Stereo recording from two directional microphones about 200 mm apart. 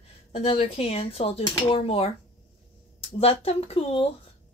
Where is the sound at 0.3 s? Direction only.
30° left (ahead or behind).